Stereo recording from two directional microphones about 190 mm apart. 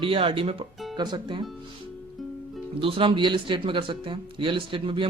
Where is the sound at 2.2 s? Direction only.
Centre (ahead or behind).